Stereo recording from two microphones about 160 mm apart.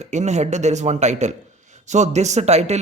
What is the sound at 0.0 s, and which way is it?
Speech, 45° right (ahead or behind).